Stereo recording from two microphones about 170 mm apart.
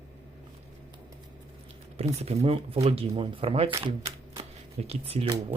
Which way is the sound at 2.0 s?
35° right (ahead or behind).